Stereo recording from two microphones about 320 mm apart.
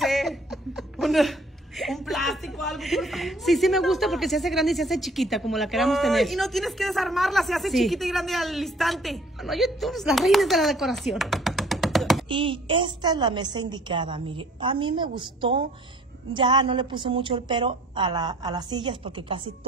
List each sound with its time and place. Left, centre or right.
0.0 s chuckle: centre
1.8 s a woman's voice: centre
12.3 s a woman's voice: centre